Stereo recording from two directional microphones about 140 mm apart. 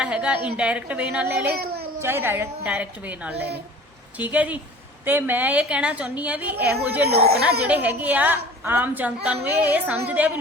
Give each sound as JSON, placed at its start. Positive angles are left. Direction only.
{"t": 0.0, "sound": "a woman's voice", "side_deg": -10}
{"t": 1.5, "sound": "speech", "side_deg": -90}
{"t": 2.0, "sound": "a woman's voice", "side_deg": -15}